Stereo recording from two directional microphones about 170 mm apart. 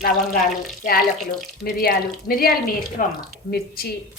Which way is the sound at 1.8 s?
60° left (ahead or behind).